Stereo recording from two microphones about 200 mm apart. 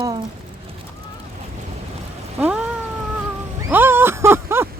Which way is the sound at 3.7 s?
10° right (ahead or behind).